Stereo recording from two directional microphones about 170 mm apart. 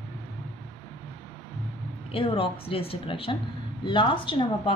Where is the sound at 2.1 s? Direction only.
35° left (ahead or behind).